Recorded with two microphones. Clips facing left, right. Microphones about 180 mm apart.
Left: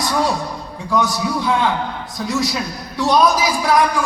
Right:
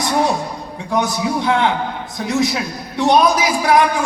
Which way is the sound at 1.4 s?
70° right (ahead or behind).